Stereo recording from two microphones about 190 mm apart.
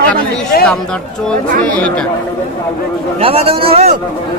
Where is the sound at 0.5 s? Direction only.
55° left (ahead or behind).